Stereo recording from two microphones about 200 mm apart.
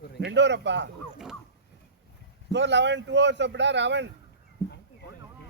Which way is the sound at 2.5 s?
60° right (ahead or behind).